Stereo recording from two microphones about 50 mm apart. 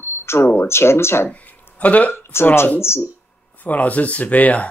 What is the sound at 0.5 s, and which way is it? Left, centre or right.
Speech, left.